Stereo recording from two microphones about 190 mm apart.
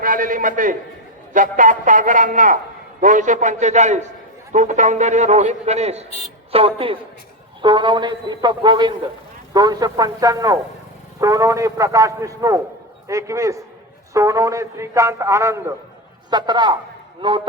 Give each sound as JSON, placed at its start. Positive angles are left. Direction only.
{"t": 0.0, "sound": "a man's voice", "side_deg": -45}